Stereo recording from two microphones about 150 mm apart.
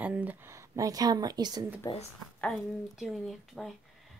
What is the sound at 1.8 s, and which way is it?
Speech, 25° left (ahead or behind).